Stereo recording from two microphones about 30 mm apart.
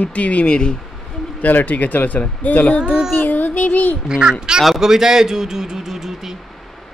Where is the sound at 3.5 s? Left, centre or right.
Left.